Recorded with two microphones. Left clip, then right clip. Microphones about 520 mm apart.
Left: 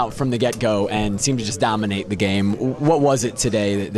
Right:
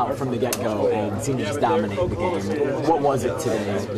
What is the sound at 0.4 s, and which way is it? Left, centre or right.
Speech, left.